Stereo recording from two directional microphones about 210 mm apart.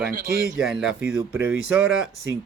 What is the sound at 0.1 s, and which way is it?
Speech, 45° right (ahead or behind).